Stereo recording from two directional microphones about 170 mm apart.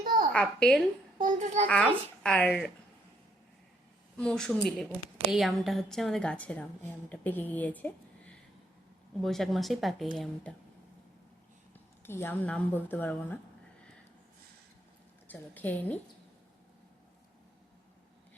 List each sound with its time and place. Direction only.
0.0 s a sound: 55° right (ahead or behind)
0.3 s a woman's voice: 5° left (ahead or behind)
1.2 s a child's voice: 45° right (ahead or behind)
1.6 s a woman's voice: 5° left (ahead or behind)
4.2 s a woman's voice: 5° left (ahead or behind)
12.0 s a woman's voice: 15° left (ahead or behind)
15.3 s a woman's voice: 10° left (ahead or behind)